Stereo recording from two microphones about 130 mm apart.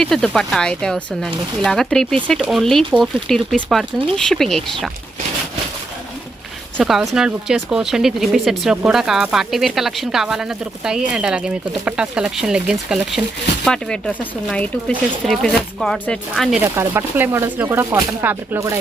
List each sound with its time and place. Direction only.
0.0 s speech: 5° left (ahead or behind)
6.7 s speech: 5° right (ahead or behind)
13.7 s speech: 5° left (ahead or behind)
16.6 s speech: 15° right (ahead or behind)